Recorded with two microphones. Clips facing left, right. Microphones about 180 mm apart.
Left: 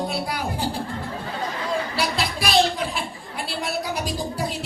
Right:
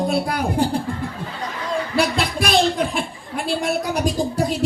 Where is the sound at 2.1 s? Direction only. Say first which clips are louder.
Right 2 dB; 50° right (ahead or behind).